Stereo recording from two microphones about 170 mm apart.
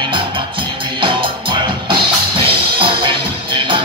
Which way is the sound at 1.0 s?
30° right (ahead or behind).